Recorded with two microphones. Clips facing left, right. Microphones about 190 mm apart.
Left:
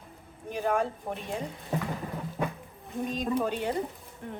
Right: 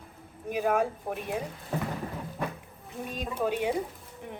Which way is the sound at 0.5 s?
10° right (ahead or behind).